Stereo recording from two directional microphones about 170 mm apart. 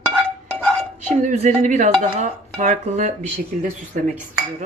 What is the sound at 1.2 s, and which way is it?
Dishes, 50° right (ahead or behind).